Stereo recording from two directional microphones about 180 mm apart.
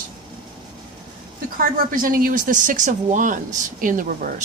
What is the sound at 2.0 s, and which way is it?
Speech, 50° right (ahead or behind).